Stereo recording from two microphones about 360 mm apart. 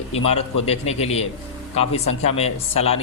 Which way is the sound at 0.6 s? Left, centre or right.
Centre.